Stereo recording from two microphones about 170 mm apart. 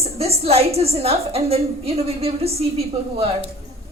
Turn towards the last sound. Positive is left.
turn(degrees=-35)  # may be behind; listen again after turning